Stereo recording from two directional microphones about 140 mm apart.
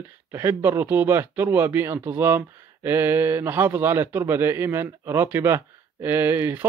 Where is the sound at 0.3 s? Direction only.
15° right (ahead or behind).